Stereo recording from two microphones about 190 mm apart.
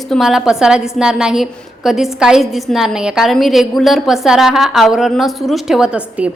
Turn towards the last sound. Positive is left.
turn(degrees=-5)  # may be behind; listen again after turning